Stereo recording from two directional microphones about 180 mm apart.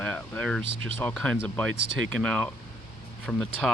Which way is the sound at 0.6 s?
30° right (ahead or behind).